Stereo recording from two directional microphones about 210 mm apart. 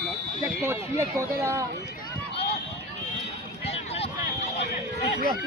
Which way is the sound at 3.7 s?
30° left (ahead or behind).